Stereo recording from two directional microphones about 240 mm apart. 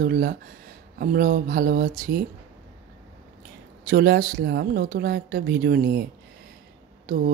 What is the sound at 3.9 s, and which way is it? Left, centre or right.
Speech, right.